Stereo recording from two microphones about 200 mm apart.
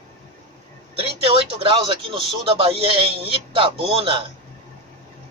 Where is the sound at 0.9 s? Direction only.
30° right (ahead or behind).